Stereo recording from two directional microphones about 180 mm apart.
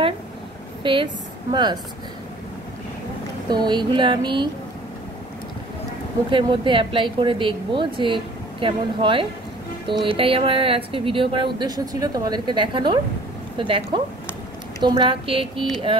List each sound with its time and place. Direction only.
0.8 s speech: 30° right (ahead or behind)
3.4 s speech: 25° right (ahead or behind)
6.3 s speech: 25° right (ahead or behind)